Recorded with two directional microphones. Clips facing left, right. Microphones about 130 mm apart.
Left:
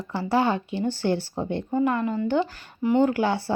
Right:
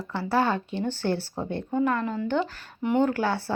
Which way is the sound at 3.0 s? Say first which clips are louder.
Left 2 dB; 15° left (ahead or behind).